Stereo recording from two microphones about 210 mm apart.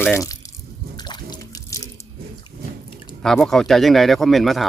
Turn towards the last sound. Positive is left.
turn(degrees=0)  # may be behind; listen again after turning